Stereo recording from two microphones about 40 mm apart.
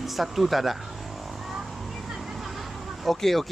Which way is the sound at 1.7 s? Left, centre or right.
Centre.